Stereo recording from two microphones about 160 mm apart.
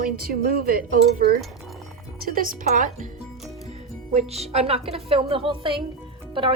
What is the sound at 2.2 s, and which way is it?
Speech, 65° right (ahead or behind).